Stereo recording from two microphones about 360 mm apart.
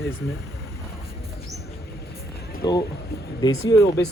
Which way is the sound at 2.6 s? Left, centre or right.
Centre.